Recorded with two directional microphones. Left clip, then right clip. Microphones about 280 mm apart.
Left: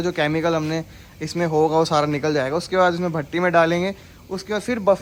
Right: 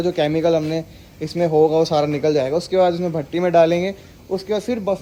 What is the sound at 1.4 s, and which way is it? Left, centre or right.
A man's voice, left.